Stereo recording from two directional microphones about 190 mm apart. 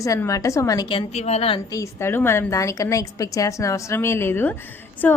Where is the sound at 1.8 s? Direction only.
15° left (ahead or behind).